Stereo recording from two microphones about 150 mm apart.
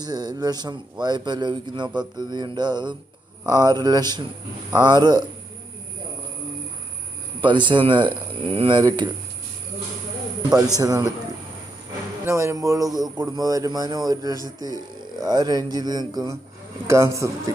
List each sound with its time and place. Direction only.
0.0 s speech: 25° right (ahead or behind)
7.4 s speech: 30° right (ahead or behind)
10.8 s speech: 25° right (ahead or behind)
12.2 s speech: 20° right (ahead or behind)